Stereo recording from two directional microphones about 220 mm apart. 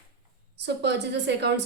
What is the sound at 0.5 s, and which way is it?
A woman's voice, 50° right (ahead or behind).